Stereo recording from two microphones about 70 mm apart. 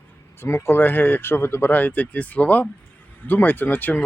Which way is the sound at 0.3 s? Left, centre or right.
Left.